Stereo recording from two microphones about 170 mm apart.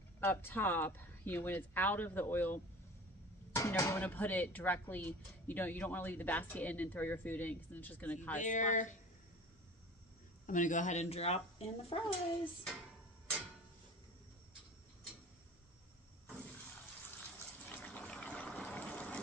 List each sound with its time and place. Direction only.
0.2 s speech: 10° left (ahead or behind)
8.4 s speech: 45° left (ahead or behind)
10.4 s speech: 50° left (ahead or behind)
17.6 s fill: 10° left (ahead or behind)